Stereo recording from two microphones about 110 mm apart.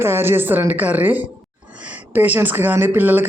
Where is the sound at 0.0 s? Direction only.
20° right (ahead or behind).